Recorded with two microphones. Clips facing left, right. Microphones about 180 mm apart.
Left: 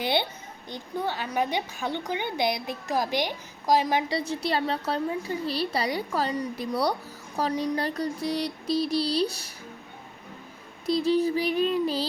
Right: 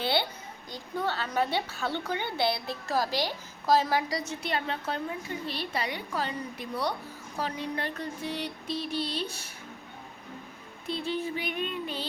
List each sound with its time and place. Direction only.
0.0 s a child's voice: 20° left (ahead or behind)
4.1 s a woman's voice: 35° left (ahead or behind)
10.8 s a woman's voice: 40° left (ahead or behind)